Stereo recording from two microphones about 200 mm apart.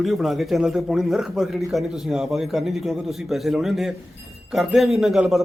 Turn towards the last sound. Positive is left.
turn(degrees=0)  # may be behind; listen again after turning